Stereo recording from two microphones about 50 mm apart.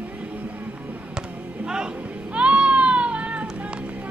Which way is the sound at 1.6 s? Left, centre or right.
Centre.